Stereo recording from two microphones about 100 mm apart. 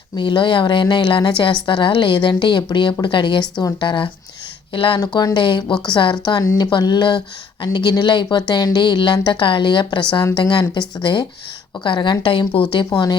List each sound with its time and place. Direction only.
0.2 s a woman's voice: 50° left (ahead or behind)
4.9 s a woman's voice: 40° left (ahead or behind)
12.7 s a woman's voice: 45° left (ahead or behind)